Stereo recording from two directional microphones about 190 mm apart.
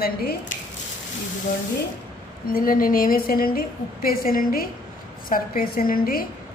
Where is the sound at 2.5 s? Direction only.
45° left (ahead or behind).